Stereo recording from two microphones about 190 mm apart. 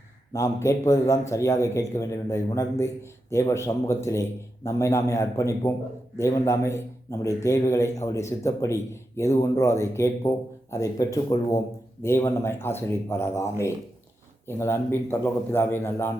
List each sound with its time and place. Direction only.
0.3 s a man's voice: 15° left (ahead or behind)